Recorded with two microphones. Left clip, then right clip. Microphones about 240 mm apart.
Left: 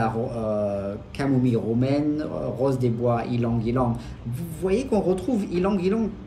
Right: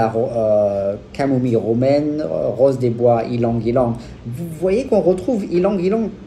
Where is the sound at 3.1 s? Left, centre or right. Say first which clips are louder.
Right 8 dB; right.